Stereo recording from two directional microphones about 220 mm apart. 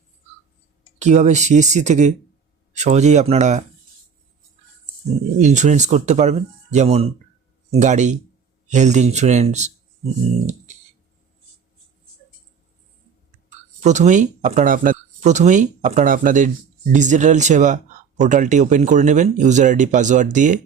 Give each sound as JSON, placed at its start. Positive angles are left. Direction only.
{"t": 0.9, "sound": "speech", "side_deg": -30}
{"t": 5.4, "sound": "speech", "side_deg": -35}
{"t": 13.8, "sound": "speech", "side_deg": -30}